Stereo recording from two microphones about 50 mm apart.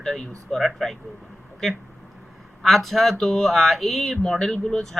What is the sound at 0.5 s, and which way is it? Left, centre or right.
Speech, centre.